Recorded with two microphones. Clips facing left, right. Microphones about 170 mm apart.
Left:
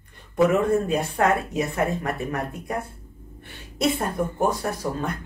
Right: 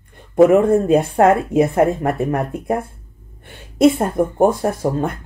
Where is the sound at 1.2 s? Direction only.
50° right (ahead or behind).